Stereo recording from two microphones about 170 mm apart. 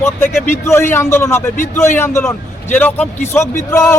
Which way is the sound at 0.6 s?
15° left (ahead or behind).